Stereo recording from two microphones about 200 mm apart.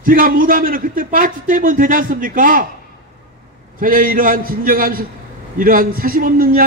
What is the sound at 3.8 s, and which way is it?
A man's voice, 45° right (ahead or behind).